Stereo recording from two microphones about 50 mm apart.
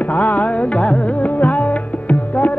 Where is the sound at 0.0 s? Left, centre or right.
Left.